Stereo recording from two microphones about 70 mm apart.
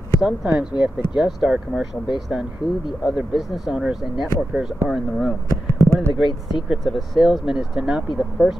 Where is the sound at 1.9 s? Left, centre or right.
Centre.